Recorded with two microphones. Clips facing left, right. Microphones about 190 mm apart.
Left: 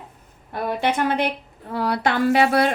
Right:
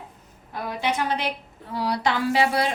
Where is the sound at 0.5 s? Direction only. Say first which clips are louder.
Left 4 dB; 55° left (ahead or behind).